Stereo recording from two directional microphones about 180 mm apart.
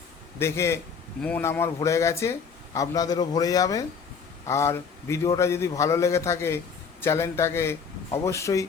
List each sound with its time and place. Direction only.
0.3 s speech: 15° left (ahead or behind)